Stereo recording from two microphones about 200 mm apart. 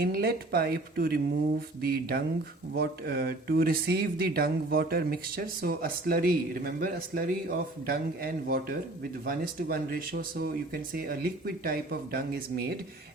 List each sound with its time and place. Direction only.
0.0 s speech: 50° right (ahead or behind)